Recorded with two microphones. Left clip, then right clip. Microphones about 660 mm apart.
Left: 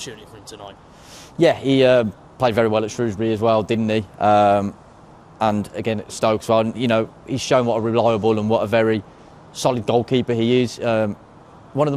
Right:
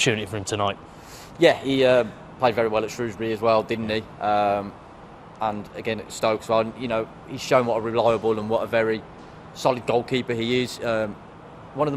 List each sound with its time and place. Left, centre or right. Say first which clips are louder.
0.1 s speech: right 12 dB; right
1.4 s speech: left 3 dB; left